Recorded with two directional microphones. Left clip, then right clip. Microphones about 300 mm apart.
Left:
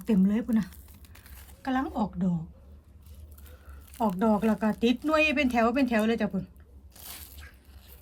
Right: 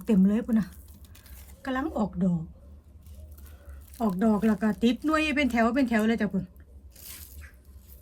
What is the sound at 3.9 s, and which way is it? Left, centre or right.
Speech, centre.